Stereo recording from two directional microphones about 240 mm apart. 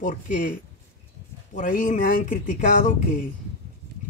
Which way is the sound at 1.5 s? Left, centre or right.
Left.